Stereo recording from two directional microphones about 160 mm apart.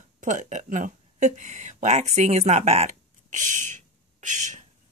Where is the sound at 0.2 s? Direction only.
50° right (ahead or behind).